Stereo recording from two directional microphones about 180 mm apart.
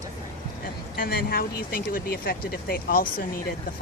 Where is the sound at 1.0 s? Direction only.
55° left (ahead or behind).